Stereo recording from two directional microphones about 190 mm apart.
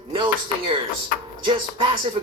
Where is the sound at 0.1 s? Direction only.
25° right (ahead or behind).